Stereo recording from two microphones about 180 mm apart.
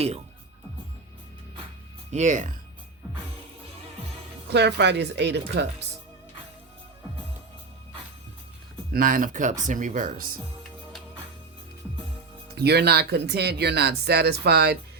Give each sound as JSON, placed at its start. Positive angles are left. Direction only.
{"t": 2.0, "sound": "speech", "side_deg": -40}
{"t": 4.4, "sound": "speech", "side_deg": -70}
{"t": 8.9, "sound": "speech", "side_deg": -50}
{"t": 12.5, "sound": "speech", "side_deg": -65}